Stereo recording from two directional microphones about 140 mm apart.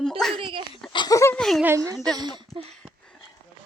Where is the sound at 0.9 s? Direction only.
35° left (ahead or behind).